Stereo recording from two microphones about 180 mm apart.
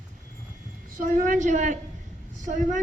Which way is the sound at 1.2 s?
45° right (ahead or behind).